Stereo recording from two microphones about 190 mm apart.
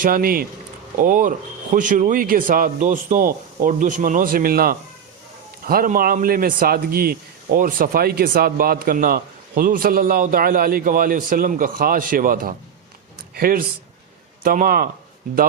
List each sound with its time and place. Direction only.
0.0 s speech: 50° right (ahead or behind)